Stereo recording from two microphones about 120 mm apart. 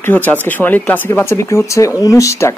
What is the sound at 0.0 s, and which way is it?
Speech, 15° left (ahead or behind).